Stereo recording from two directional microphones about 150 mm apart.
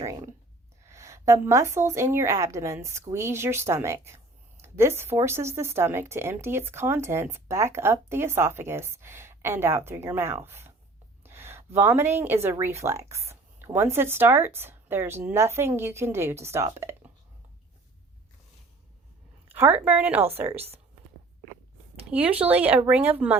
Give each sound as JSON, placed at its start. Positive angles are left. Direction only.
{"t": 0.0, "sound": "a sound", "side_deg": -20}
{"t": 0.9, "sound": "a woman's voice", "side_deg": -20}
{"t": 19.5, "sound": "speech", "side_deg": -15}
{"t": 22.1, "sound": "speech", "side_deg": -10}